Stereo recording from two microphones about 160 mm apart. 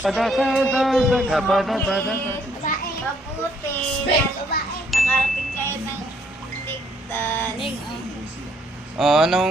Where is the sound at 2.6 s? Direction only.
55° left (ahead or behind).